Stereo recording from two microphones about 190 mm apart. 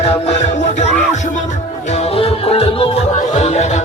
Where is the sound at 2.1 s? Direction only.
30° left (ahead or behind).